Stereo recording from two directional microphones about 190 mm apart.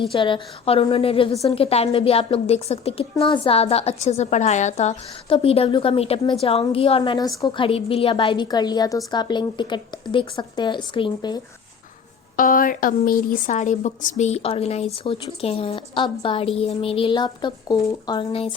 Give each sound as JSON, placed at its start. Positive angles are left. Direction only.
{"t": 0.1, "sound": "a woman's voice", "side_deg": 25}
{"t": 12.4, "sound": "speech", "side_deg": 45}